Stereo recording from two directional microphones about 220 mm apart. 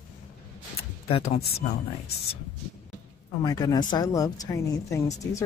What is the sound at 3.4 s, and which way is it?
Speech, 15° left (ahead or behind).